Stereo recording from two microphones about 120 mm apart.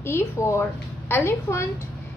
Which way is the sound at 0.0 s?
20° left (ahead or behind).